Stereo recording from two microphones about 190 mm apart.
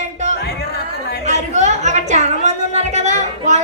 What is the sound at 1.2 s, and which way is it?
Music, 40° right (ahead or behind).